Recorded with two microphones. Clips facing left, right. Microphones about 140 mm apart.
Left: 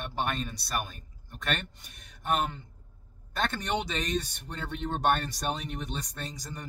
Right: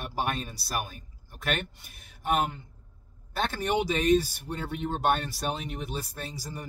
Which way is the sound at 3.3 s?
10° right (ahead or behind).